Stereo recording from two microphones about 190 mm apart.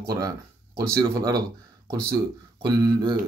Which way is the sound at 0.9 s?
20° right (ahead or behind).